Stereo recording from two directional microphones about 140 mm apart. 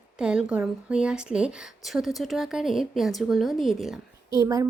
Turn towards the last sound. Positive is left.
turn(degrees=-20)  # may be behind; listen again after turning